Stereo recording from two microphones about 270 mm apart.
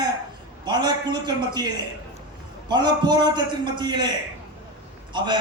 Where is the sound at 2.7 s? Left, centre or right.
Centre.